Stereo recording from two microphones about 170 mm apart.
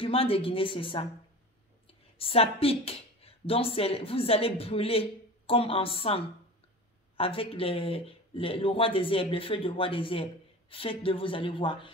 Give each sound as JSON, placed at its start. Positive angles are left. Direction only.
{"t": 0.0, "sound": "speech", "side_deg": 35}
{"t": 2.1, "sound": "speech", "side_deg": 35}